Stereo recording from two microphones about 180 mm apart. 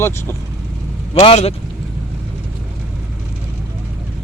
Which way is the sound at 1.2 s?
35° left (ahead or behind).